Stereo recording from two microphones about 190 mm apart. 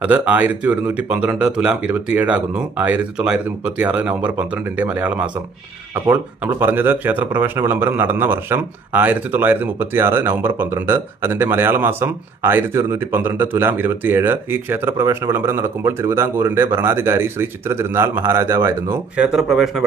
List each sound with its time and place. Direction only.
0.0 s speech: 10° right (ahead or behind)